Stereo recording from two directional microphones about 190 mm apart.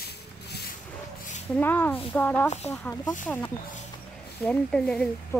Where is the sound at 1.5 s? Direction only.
10° left (ahead or behind).